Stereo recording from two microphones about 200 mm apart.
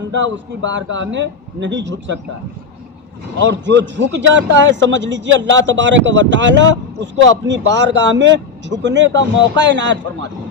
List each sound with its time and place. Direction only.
0.1 s a man's voice: 65° right (ahead or behind)
3.4 s a man's voice: 60° right (ahead or behind)